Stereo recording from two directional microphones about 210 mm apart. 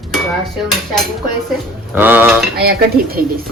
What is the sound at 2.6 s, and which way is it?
Speech, 45° right (ahead or behind).